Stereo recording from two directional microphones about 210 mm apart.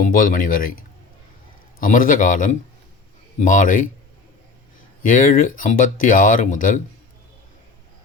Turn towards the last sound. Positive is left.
turn(degrees=40)  # may be behind; listen again after turning